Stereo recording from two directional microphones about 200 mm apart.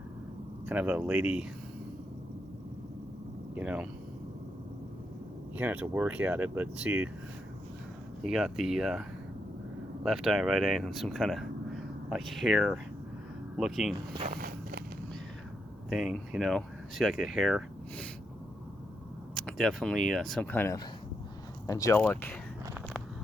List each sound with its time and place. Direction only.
0.6 s speech: 5° right (ahead or behind)
3.5 s speech: 5° right (ahead or behind)
5.5 s speech: 10° right (ahead or behind)
8.2 s speech: centre (ahead or behind)
14.3 s walk: 50° right (ahead or behind)
15.9 s speech: centre (ahead or behind)
19.3 s a sound: centre (ahead or behind)
20.1 s speech: centre (ahead or behind)